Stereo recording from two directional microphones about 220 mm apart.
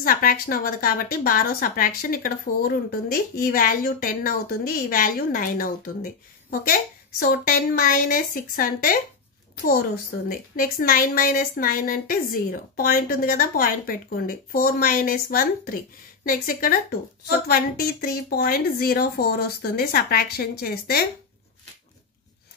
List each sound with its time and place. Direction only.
0.0 s a woman's voice: 40° left (ahead or behind)